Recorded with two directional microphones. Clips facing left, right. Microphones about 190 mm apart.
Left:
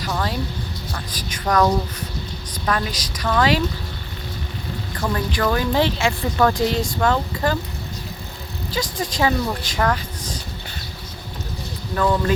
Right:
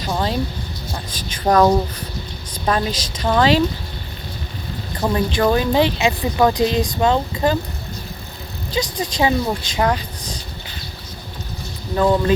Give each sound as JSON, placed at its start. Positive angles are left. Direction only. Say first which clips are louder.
{"t": 0.0, "sound": "speech", "louder": "right 3 dB", "side_deg": -25}
{"t": 4.9, "sound": "speech", "louder": "right 5 dB", "side_deg": -20}
{"t": 8.7, "sound": "speech", "louder": "right 3 dB", "side_deg": -20}
{"t": 11.9, "sound": "speech", "louder": "right 4 dB", "side_deg": -25}